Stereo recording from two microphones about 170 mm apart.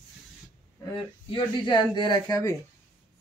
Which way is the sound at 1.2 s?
25° left (ahead or behind).